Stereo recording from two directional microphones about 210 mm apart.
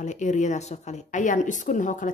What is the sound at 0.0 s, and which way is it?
A woman's voice, 35° left (ahead or behind).